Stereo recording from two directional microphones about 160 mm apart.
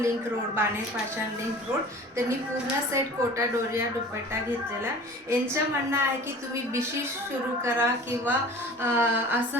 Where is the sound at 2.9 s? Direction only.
15° right (ahead or behind).